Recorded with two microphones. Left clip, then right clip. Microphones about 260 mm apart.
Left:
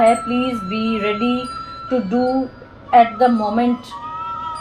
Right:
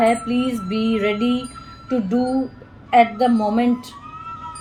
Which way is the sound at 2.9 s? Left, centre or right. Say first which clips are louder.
Left 3 dB; right.